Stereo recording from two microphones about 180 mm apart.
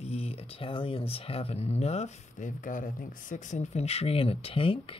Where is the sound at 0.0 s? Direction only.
35° left (ahead or behind).